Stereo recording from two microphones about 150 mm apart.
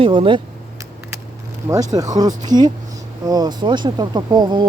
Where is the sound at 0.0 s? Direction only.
35° right (ahead or behind).